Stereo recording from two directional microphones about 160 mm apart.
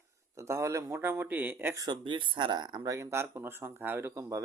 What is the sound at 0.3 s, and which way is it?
Speech, 15° right (ahead or behind).